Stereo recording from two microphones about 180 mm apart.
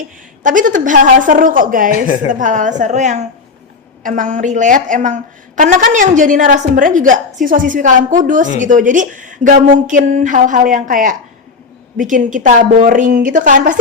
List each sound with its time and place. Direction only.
0.4 s a woman's voice: 45° right (ahead or behind)